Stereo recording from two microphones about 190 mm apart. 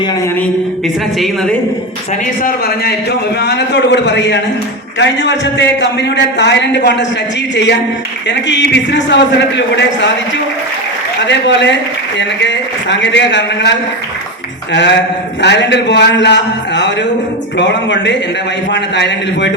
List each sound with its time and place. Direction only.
2.4 s a man's voice: 55° left (ahead or behind)